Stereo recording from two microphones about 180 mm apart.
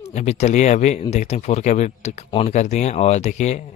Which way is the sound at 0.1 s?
40° left (ahead or behind).